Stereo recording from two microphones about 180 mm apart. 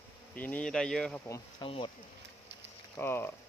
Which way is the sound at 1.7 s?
30° left (ahead or behind).